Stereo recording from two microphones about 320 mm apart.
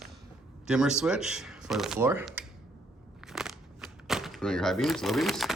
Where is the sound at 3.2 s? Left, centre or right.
Centre.